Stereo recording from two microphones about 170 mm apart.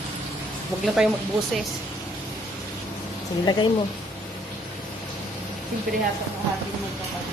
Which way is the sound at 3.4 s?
25° left (ahead or behind).